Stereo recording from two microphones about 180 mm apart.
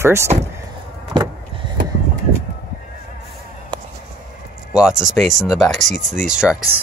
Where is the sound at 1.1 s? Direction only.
25° right (ahead or behind).